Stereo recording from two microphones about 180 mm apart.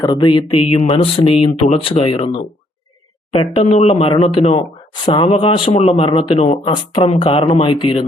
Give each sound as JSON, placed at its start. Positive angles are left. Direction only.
{"t": 0.0, "sound": "speech", "side_deg": 25}